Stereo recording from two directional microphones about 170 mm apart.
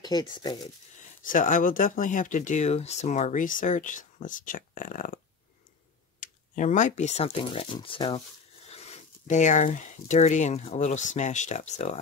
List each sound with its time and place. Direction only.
0.0 s speech: 25° left (ahead or behind)
1.2 s speech: 50° left (ahead or behind)